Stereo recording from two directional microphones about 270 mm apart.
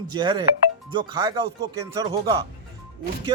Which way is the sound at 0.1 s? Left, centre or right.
Centre.